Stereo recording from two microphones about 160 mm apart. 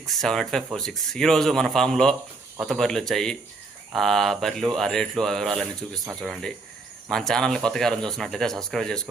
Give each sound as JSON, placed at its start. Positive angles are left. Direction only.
{"t": 0.0, "sound": "speech", "side_deg": 0}